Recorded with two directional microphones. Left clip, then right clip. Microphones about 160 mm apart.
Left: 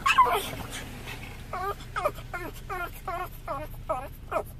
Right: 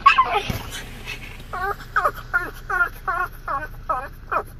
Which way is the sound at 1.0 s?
45° left (ahead or behind).